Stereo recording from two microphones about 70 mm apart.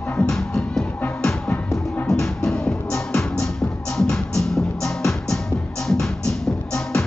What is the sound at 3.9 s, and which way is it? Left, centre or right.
Music, centre.